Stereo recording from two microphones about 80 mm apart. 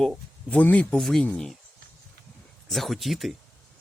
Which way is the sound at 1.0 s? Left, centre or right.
Centre.